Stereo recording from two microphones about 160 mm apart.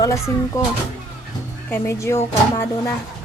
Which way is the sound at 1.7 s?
15° left (ahead or behind).